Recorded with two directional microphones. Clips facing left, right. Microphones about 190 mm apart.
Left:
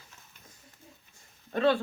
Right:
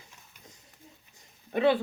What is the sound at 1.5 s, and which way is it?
Speech, 15° right (ahead or behind).